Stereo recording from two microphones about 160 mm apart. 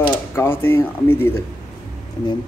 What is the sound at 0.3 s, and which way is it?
Speech, 15° left (ahead or behind).